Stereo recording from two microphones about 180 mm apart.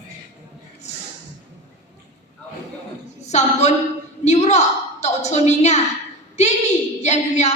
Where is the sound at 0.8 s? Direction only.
40° left (ahead or behind).